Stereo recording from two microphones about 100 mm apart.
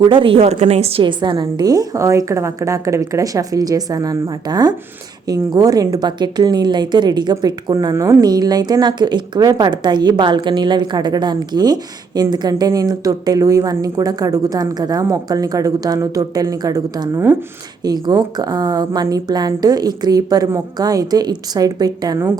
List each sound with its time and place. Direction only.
0.0 s a woman's voice: 60° right (ahead or behind); by 1.0 s 85° right
1.0 s a woman's voice: 50° right (ahead or behind)